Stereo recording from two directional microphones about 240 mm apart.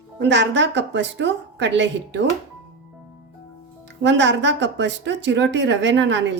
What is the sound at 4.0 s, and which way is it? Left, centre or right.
A woman's voice, right.